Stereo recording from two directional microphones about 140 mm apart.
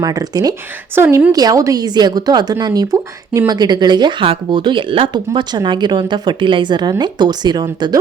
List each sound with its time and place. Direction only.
0.0 s speech: 25° right (ahead or behind)
0.9 s a woman's voice: 15° right (ahead or behind)
1.3 s a woman's voice: 25° right (ahead or behind)